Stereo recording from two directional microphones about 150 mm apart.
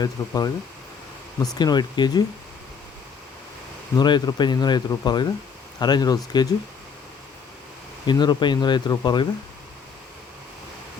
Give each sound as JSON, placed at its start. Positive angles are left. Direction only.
{"t": 0.0, "sound": "speech", "side_deg": 25}
{"t": 1.5, "sound": "speech", "side_deg": 30}
{"t": 3.9, "sound": "speech", "side_deg": 30}
{"t": 8.0, "sound": "speech", "side_deg": 30}